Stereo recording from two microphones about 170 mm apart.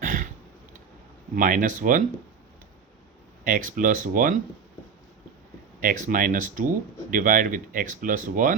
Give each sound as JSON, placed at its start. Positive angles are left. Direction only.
{"t": 0.0, "sound": "a sound", "side_deg": -50}
{"t": 1.4, "sound": "speech", "side_deg": -50}
{"t": 3.4, "sound": "speech", "side_deg": -50}
{"t": 5.8, "sound": "speech", "side_deg": -50}